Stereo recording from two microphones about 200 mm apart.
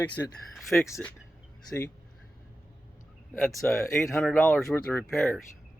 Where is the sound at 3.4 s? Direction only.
10° left (ahead or behind).